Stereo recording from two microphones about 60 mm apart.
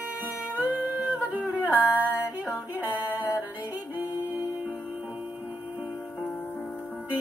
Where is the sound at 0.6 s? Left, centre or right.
Right.